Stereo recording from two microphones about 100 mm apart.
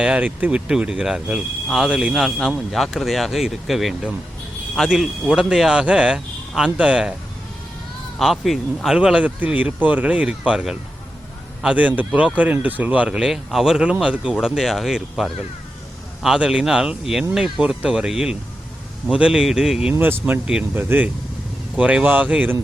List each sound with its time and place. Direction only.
0.0 s a man's voice: 15° right (ahead or behind)
8.2 s a man's voice: centre (ahead or behind)
9.0 s a man's voice: 10° right (ahead or behind)
19.9 s speech: 20° right (ahead or behind)